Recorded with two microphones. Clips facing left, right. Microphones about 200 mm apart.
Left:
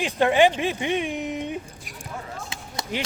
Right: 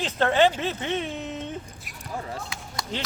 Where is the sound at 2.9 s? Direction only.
10° left (ahead or behind).